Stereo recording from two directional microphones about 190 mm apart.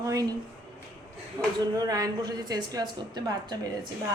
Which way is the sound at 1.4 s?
20° right (ahead or behind).